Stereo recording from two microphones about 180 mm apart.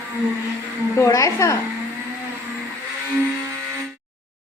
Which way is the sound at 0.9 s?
15° left (ahead or behind).